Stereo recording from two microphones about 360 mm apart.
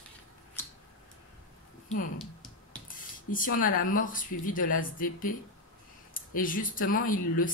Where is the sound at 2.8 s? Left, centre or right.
Left.